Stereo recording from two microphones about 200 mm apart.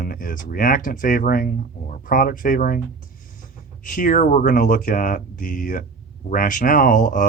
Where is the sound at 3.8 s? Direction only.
45° left (ahead or behind).